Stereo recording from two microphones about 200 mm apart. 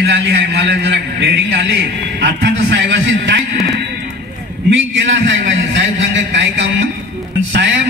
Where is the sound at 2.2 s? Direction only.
60° right (ahead or behind).